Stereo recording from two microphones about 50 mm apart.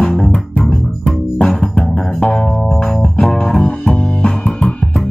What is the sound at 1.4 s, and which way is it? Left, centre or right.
Music, centre.